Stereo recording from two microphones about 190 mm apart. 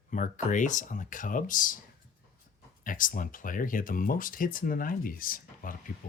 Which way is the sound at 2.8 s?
45° left (ahead or behind).